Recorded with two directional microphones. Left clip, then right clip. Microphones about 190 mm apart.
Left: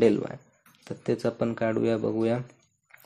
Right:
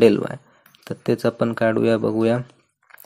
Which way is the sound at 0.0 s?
25° right (ahead or behind).